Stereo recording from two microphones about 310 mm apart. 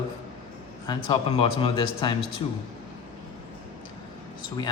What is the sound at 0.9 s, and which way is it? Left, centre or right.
Speech, centre.